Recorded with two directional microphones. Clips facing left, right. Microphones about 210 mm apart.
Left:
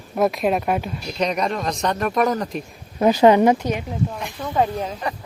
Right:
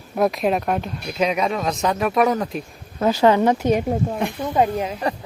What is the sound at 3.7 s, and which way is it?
Speech, 55° right (ahead or behind).